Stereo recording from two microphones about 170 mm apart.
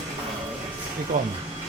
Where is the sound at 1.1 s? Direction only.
50° right (ahead or behind).